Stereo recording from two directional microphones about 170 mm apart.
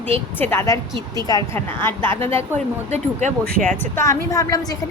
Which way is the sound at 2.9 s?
45° right (ahead or behind).